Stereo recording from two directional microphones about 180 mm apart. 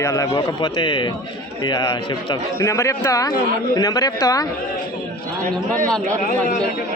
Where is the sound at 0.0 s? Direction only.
15° left (ahead or behind).